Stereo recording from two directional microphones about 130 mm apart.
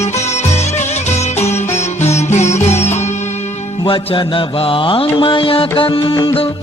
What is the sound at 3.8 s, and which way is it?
Music, 40° left (ahead or behind).